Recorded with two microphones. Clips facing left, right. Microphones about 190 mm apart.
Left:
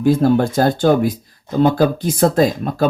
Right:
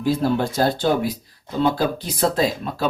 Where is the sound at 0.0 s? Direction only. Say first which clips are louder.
Left 6 dB; 50° left (ahead or behind).